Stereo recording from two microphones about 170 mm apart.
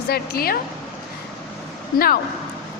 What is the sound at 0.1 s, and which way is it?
Speech, 60° left (ahead or behind).